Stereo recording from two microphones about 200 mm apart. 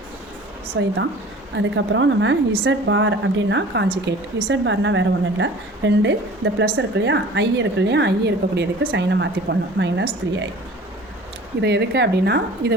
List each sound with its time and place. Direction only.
0.8 s a woman's voice: 65° right (ahead or behind)
11.6 s a woman's voice: 55° right (ahead or behind)